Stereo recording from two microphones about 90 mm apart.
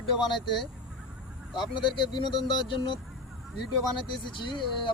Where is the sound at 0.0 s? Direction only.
55° left (ahead or behind).